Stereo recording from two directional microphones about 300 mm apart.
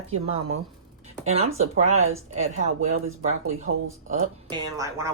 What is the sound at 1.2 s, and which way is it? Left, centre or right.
Speech, right.